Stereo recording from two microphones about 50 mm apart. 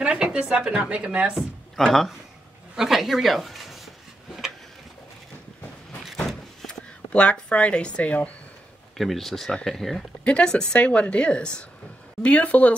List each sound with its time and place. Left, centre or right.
0.0 s speech: right
1.8 s speech: centre
2.7 s speech: centre
6.2 s a sound: centre
7.1 s a woman's voice: left
8.9 s speech: centre
10.2 s a woman's voice: left